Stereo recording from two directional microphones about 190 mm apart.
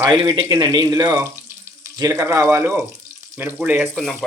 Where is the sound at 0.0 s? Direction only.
20° right (ahead or behind).